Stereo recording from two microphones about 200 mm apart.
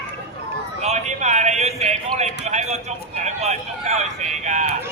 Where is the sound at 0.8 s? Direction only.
35° right (ahead or behind).